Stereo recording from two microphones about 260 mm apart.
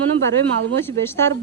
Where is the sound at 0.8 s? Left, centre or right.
Centre.